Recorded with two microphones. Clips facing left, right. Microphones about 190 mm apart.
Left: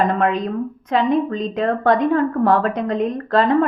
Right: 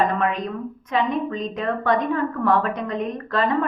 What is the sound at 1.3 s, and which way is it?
A woman's voice, 35° left (ahead or behind).